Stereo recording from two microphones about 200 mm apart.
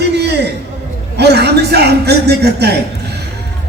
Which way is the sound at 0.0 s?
55° right (ahead or behind).